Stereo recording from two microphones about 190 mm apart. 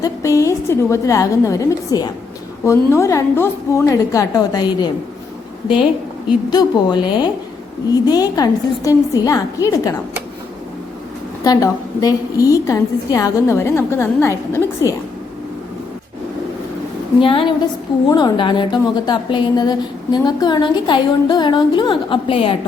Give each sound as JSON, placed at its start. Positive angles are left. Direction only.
{"t": 0.0, "sound": "a woman's voice", "side_deg": 15}
{"t": 6.5, "sound": "speech", "side_deg": 25}
{"t": 11.4, "sound": "a woman's voice", "side_deg": 20}
{"t": 17.2, "sound": "speech", "side_deg": 25}